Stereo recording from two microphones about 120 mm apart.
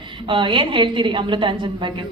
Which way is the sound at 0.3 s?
45° right (ahead or behind).